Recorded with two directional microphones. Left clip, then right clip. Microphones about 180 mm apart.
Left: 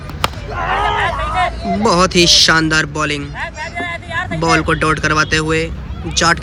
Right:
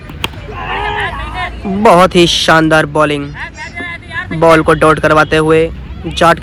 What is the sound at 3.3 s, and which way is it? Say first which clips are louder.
Music: left 1 dB; 25° left (ahead or behind).